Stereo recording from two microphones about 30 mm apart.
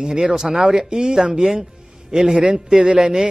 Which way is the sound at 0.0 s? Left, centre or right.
Right.